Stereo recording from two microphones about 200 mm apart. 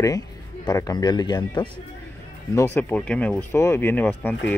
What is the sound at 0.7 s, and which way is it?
Speech, 20° left (ahead or behind).